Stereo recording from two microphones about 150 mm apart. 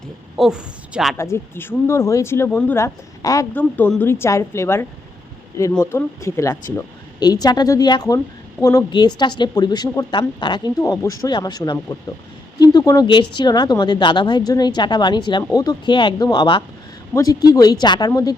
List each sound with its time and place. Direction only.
0.3 s a woman's voice: 5° right (ahead or behind)
1.1 s speech: 15° left (ahead or behind)
3.5 s speech: 10° left (ahead or behind)